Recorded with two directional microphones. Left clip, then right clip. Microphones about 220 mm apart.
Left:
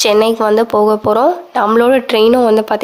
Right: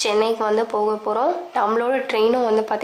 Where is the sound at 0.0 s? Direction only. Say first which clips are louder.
Left 9 dB; 35° left (ahead or behind).